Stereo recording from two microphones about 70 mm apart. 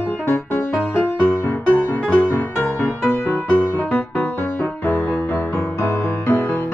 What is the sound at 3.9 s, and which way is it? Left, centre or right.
Music, left.